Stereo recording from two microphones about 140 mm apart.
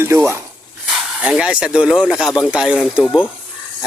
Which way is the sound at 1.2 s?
5° right (ahead or behind).